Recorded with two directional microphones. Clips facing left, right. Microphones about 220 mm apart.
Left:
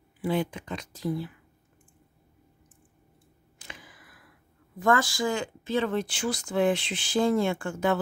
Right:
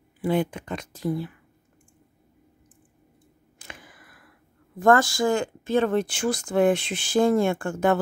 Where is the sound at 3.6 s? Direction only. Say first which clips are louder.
Right 2 dB; 50° right (ahead or behind).